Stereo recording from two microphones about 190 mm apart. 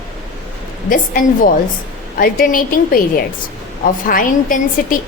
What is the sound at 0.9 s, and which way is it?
A woman's voice, 45° left (ahead or behind).